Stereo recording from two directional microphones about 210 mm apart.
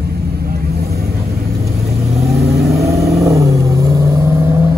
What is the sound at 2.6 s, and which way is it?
Vehicle, 15° right (ahead or behind).